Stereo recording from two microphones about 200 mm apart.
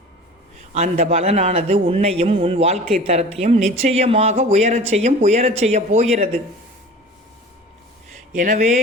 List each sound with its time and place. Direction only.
0.7 s speech: 35° right (ahead or behind)
8.3 s speech: 35° right (ahead or behind)